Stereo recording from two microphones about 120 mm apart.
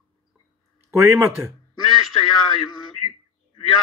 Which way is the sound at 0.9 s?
20° right (ahead or behind).